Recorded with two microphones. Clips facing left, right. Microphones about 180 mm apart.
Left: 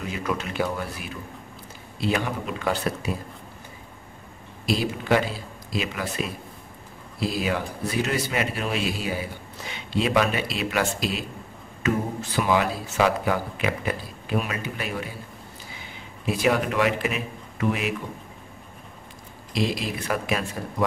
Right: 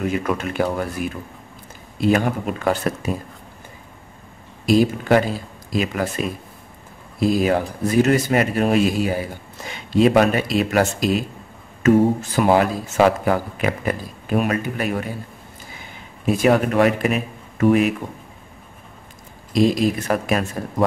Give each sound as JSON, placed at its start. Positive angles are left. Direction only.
{"t": 0.0, "sound": "a man's voice", "side_deg": -55}
{"t": 4.6, "sound": "a man's voice", "side_deg": -45}
{"t": 7.2, "sound": "a man's voice", "side_deg": -45}
{"t": 16.3, "sound": "a man's voice", "side_deg": -45}
{"t": 19.5, "sound": "a man's voice", "side_deg": -45}